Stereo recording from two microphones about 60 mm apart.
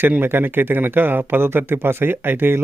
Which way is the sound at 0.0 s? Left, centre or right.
Right.